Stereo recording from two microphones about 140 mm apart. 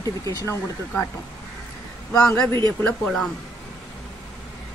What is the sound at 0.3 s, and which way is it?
Speech, 25° left (ahead or behind).